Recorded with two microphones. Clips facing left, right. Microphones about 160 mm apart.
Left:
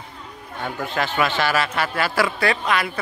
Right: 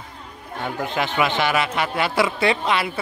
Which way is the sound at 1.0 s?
15° right (ahead or behind).